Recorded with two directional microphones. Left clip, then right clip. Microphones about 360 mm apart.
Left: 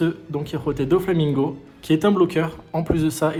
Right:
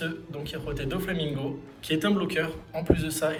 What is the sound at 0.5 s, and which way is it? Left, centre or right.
Speech, centre.